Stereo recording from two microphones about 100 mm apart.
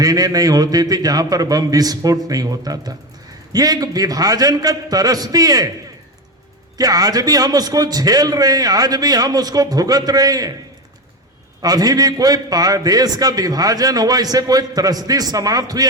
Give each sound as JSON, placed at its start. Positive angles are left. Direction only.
{"t": 0.0, "sound": "a man's voice", "side_deg": -40}
{"t": 6.7, "sound": "a man's voice", "side_deg": -40}
{"t": 11.6, "sound": "a man's voice", "side_deg": -40}